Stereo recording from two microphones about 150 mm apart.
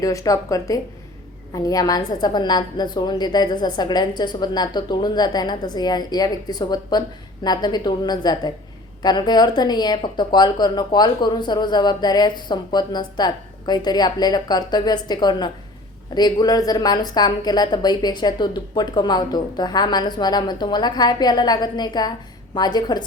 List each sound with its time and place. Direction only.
0.0 s speech: 20° left (ahead or behind)